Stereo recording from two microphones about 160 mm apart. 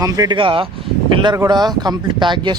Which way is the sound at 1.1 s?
30° right (ahead or behind).